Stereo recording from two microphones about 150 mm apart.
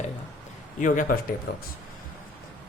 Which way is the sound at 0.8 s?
60° left (ahead or behind).